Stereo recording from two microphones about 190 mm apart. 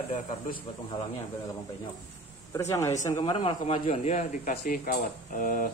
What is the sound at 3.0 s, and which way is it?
Speech, 20° left (ahead or behind).